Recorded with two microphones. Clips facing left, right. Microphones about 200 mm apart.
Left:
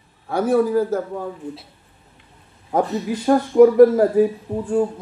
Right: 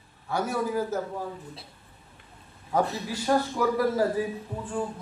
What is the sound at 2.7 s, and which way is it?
A man's voice, 55° left (ahead or behind).